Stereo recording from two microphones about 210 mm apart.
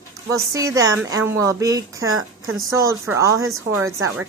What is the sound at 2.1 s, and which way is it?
Speech, 80° right.